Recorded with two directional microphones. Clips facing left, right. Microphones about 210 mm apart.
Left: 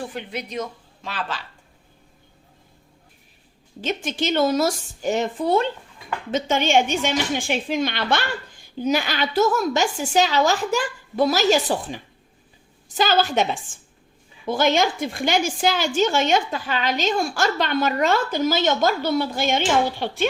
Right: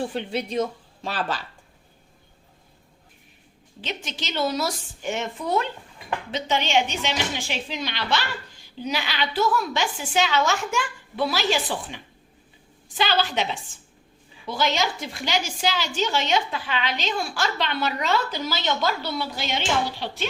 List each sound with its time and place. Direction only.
0.0 s speech: 30° right (ahead or behind)
3.8 s a woman's voice: 50° left (ahead or behind); by 5.6 s 30° left (ahead or behind)
6.3 s a woman's voice: 50° left (ahead or behind)